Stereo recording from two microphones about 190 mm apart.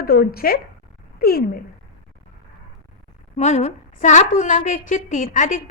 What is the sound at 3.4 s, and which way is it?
A woman's voice, 35° left (ahead or behind).